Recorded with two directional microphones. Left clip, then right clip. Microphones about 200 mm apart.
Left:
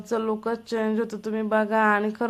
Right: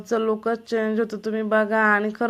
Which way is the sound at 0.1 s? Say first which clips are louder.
Right 4 dB; 5° right (ahead or behind).